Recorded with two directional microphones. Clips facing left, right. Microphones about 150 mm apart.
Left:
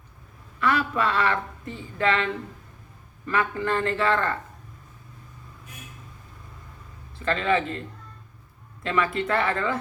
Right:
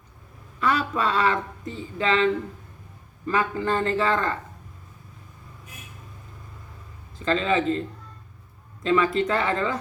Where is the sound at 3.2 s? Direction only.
35° right (ahead or behind).